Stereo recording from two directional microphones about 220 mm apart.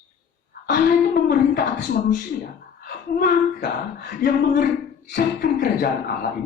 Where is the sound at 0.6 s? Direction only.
40° left (ahead or behind).